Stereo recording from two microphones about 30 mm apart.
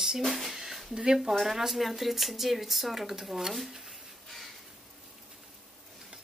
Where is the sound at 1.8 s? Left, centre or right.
Centre.